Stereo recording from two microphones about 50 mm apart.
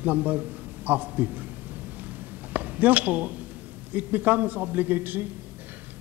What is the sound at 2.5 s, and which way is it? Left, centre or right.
A man's voice, right.